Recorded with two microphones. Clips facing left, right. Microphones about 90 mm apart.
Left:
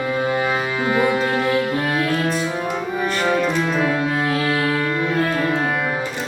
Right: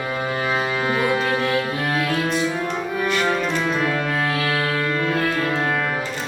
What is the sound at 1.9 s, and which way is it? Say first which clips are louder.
Music: left 1 dB; centre (ahead or behind).